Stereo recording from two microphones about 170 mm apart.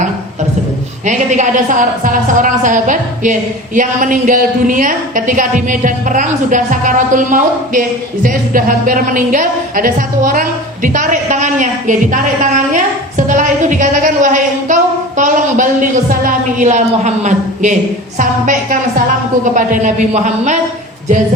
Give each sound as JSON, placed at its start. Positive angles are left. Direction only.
{"t": 1.0, "sound": "a man's voice", "side_deg": -45}